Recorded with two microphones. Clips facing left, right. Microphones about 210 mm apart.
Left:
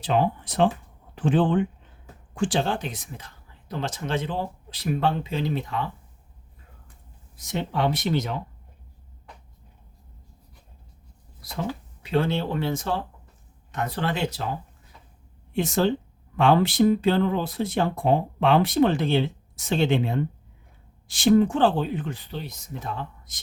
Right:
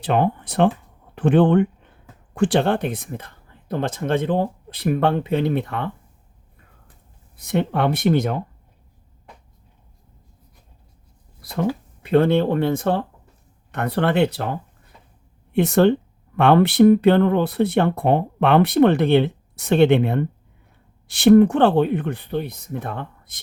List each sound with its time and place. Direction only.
0.0 s speech: 55° right (ahead or behind)
7.3 s speech: 55° right (ahead or behind)
11.4 s speech: 55° right (ahead or behind)